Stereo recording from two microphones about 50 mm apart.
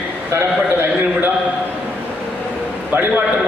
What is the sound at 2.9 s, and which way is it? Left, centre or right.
Speech, right.